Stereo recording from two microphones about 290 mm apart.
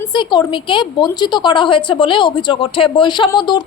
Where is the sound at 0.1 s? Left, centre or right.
Centre.